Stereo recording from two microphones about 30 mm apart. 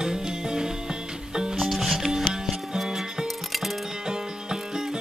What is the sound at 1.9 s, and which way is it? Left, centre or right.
Music, centre.